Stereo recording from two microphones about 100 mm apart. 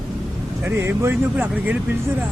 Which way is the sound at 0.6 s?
25° right (ahead or behind).